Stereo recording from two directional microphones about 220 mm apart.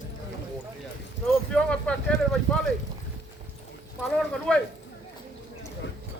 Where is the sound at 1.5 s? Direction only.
5° left (ahead or behind).